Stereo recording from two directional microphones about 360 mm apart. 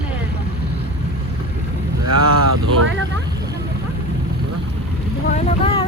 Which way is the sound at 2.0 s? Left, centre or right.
Right.